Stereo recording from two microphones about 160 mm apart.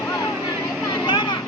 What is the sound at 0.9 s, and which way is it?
Vehicle, 25° left (ahead or behind).